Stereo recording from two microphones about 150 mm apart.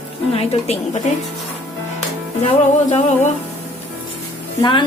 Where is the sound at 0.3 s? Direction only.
40° left (ahead or behind).